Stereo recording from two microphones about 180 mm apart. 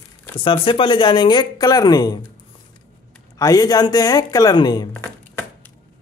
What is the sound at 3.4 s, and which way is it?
Speech, 20° left (ahead or behind).